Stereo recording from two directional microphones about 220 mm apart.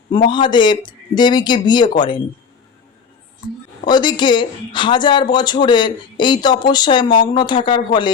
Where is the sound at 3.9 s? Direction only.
20° left (ahead or behind).